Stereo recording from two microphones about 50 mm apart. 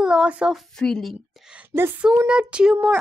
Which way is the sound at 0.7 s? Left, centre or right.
Centre.